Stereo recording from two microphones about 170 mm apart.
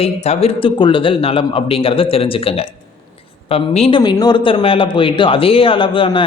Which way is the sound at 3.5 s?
35° left (ahead or behind).